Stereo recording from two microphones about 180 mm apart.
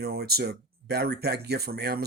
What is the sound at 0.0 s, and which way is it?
Speech, 60° right (ahead or behind).